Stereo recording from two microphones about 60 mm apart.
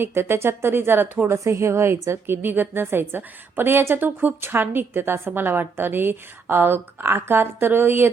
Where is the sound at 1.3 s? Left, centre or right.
Right.